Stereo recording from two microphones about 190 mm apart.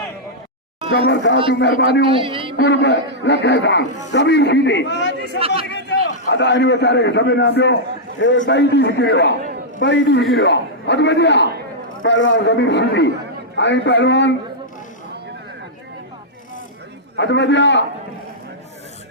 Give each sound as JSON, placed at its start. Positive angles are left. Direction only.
{"t": 0.9, "sound": "a man's voice", "side_deg": 65}
{"t": 2.1, "sound": "a man's voice", "side_deg": -30}
{"t": 2.6, "sound": "a man's voice", "side_deg": 70}
{"t": 12.0, "sound": "a man's voice", "side_deg": 80}
{"t": 17.2, "sound": "a man's voice", "side_deg": 70}